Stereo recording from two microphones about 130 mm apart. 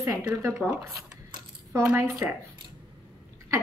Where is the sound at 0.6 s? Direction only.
10° left (ahead or behind).